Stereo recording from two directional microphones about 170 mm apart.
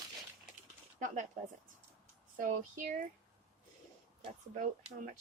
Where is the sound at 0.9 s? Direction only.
50° right (ahead or behind).